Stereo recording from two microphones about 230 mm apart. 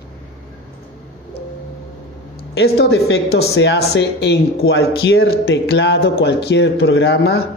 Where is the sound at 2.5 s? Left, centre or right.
Left.